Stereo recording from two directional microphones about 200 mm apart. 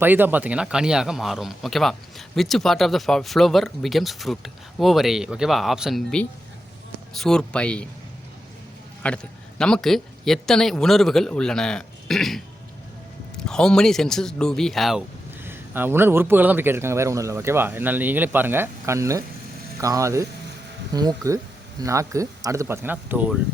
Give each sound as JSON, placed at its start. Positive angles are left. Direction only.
{"t": 0.0, "sound": "speech", "side_deg": -10}
{"t": 9.0, "sound": "a man's voice", "side_deg": 5}